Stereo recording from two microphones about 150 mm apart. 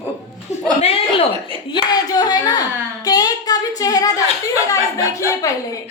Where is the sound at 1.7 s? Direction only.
25° left (ahead or behind).